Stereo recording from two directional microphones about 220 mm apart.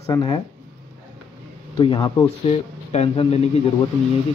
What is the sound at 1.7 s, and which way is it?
Speech, 20° left (ahead or behind).